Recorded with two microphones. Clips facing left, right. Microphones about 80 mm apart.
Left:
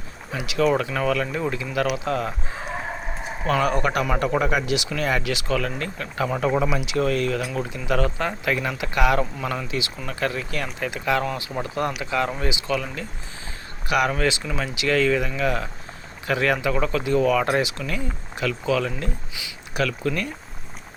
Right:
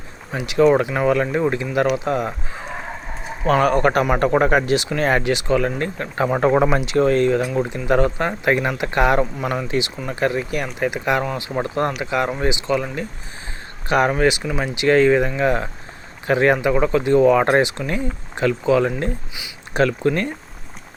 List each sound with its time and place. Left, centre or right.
0.3 s speech: right
2.0 s speech: centre
3.4 s speech: right
5.3 s speech: right
6.4 s speech: right; by 11.4 s centre
11.4 s speech: right
14.1 s speech: right
14.8 s speech: right